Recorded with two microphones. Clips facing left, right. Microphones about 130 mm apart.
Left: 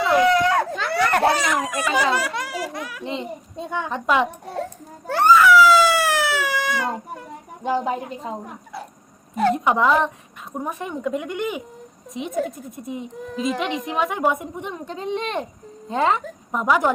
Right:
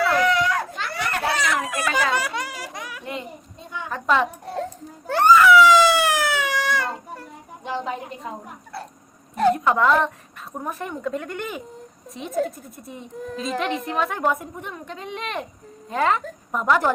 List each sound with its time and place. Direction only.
0.0 s a sound: 20° left (ahead or behind)
0.5 s a sound: 60° left (ahead or behind)
1.2 s baby cry: 30° left (ahead or behind)
1.7 s speech: 10° left (ahead or behind)
3.0 s speech: 25° left (ahead or behind)
4.0 s a woman's voice: 10° left (ahead or behind)
5.4 s a sound: centre (ahead or behind)
7.6 s speech: 40° left (ahead or behind)
9.3 s a woman's voice: centre (ahead or behind)
9.6 s a woman's voice: 10° left (ahead or behind)
14.7 s speech: 30° left (ahead or behind)
16.2 s a woman's voice: 10° left (ahead or behind)